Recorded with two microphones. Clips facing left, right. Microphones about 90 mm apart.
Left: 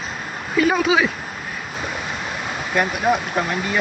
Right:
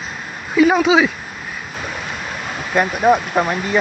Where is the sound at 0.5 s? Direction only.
10° right (ahead or behind).